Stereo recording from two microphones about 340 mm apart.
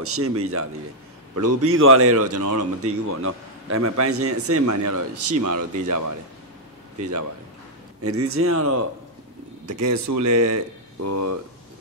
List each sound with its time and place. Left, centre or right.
0.0 s a man's voice: right
8.0 s a man's voice: right